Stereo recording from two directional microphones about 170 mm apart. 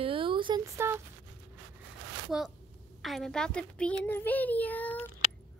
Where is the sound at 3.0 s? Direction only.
Centre (ahead or behind).